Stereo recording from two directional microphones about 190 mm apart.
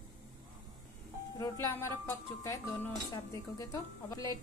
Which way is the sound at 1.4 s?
15° left (ahead or behind).